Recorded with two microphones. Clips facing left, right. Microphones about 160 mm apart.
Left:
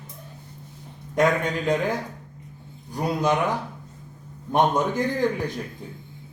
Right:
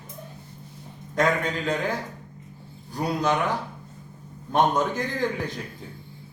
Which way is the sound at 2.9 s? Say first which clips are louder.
Left 1 dB; 15° left (ahead or behind).